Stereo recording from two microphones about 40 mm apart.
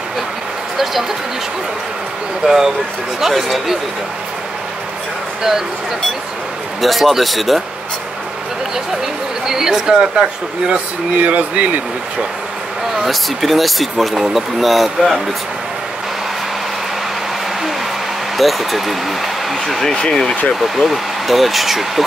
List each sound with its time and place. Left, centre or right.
2.4 s speech: centre
6.8 s speech: centre
9.5 s speech: centre
10.7 s speech: right
13.0 s speech: centre
18.4 s speech: centre
19.9 s speech: left
20.6 s speech: centre